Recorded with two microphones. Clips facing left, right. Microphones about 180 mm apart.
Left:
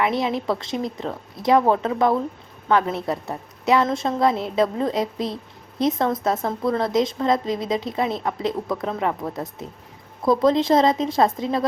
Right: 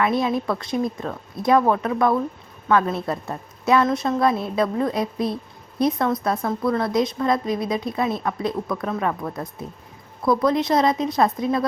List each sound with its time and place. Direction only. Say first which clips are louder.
0.0 s speech: right 1 dB; 20° left (ahead or behind)